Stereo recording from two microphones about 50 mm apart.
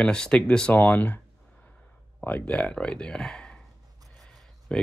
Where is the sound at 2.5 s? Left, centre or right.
Left.